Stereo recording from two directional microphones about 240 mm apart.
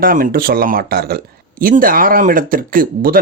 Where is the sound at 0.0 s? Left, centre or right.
Right.